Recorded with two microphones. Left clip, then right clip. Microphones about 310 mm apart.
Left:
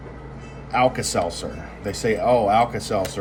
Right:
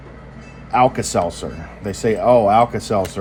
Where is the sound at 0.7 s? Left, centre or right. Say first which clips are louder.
Right 4 dB; centre.